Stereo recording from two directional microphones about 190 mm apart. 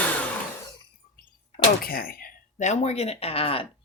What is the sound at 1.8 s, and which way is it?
Speech, 50° left (ahead or behind).